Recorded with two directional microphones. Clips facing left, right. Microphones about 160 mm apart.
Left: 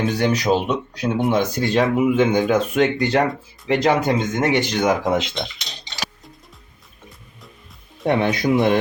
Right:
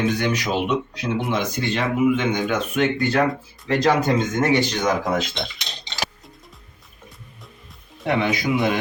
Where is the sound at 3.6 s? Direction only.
20° left (ahead or behind).